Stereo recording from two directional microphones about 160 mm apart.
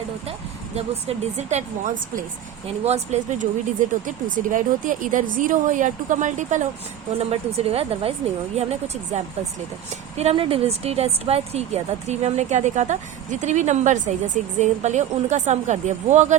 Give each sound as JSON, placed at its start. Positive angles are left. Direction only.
{"t": 0.8, "sound": "a woman's voice", "side_deg": -40}
{"t": 4.0, "sound": "a woman's voice", "side_deg": -55}